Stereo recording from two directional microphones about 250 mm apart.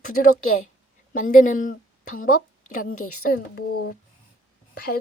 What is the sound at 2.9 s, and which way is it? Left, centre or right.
Speech, left.